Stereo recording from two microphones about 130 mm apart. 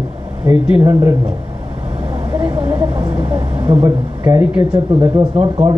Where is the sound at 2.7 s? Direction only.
40° right (ahead or behind).